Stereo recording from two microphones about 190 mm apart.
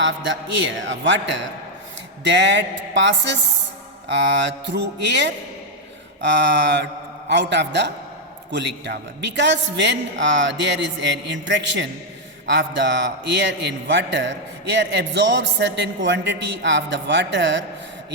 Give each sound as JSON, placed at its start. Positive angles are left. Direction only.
{"t": 0.0, "sound": "a man's voice", "side_deg": -70}